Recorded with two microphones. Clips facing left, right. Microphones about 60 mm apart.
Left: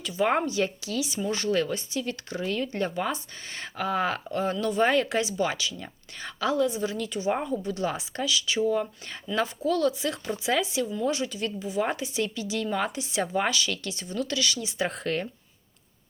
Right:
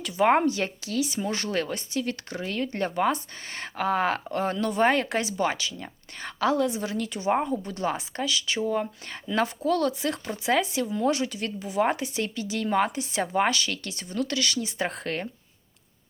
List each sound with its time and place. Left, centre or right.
0.4 s speech: right
9.2 s speech: right